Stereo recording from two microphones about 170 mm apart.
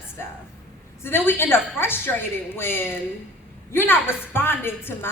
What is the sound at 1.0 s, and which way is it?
A woman's voice, 15° left (ahead or behind).